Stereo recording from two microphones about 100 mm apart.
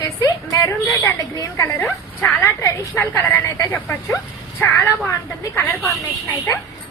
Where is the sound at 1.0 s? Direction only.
30° left (ahead or behind).